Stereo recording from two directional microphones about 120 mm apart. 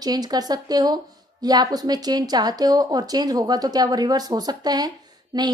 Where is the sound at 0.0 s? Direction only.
35° right (ahead or behind).